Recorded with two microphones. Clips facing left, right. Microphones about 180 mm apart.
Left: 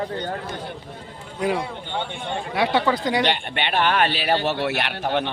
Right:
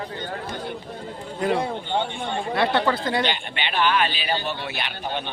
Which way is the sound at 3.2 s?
60° left (ahead or behind).